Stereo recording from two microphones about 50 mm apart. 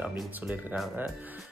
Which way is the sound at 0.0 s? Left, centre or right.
Right.